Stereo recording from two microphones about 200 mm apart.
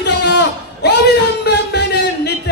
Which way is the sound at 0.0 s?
60° left (ahead or behind).